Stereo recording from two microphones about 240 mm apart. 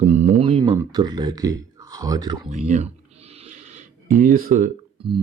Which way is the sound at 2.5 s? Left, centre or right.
Right.